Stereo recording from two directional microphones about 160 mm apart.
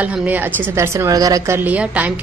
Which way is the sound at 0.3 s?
20° right (ahead or behind).